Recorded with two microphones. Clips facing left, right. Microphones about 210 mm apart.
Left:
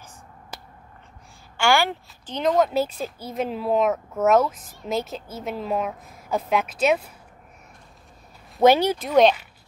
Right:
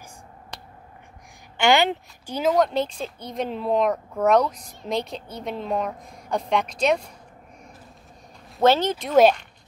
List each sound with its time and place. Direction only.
0.5 s finger snapping: 5° left (ahead or behind)
1.6 s speech: 20° right (ahead or behind)
2.3 s speech: centre (ahead or behind)
8.5 s speech: 15° left (ahead or behind)